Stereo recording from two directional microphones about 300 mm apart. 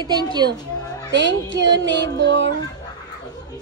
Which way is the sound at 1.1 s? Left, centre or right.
Right.